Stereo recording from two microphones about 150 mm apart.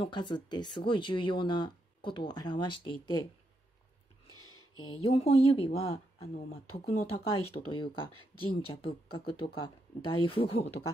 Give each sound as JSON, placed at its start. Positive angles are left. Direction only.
{"t": 0.0, "sound": "speech", "side_deg": 30}
{"t": 4.8, "sound": "speech", "side_deg": 40}